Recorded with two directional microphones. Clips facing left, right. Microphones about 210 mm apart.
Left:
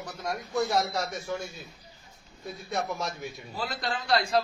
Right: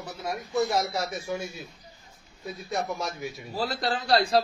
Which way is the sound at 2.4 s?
Centre (ahead or behind).